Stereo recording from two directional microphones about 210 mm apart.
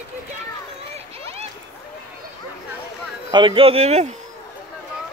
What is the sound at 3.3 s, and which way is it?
Speech, 25° right (ahead or behind).